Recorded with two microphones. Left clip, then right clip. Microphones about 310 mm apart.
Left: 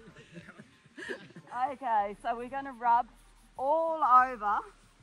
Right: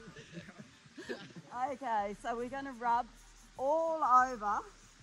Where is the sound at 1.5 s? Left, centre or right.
Centre.